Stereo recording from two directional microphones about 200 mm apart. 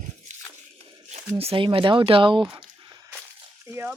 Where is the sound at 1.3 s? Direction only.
25° right (ahead or behind).